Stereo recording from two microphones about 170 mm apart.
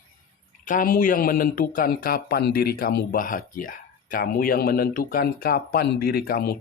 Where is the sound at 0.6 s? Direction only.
50° left (ahead or behind).